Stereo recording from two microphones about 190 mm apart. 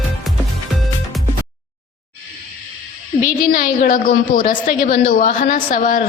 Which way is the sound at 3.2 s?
45° left (ahead or behind).